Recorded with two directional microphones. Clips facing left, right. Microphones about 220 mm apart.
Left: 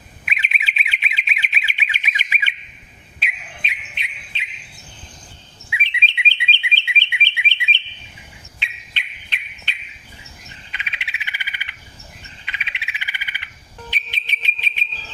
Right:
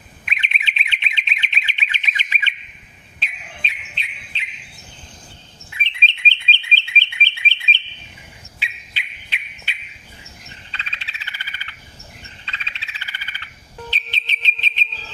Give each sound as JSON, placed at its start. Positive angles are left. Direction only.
{"t": 0.3, "sound": "bird", "side_deg": 5}
{"t": 3.9, "sound": "cricket", "side_deg": 15}
{"t": 5.7, "sound": "bird", "side_deg": 10}
{"t": 8.5, "sound": "bird", "side_deg": -5}
{"t": 10.7, "sound": "frog", "side_deg": 15}
{"t": 13.9, "sound": "whistle", "side_deg": 10}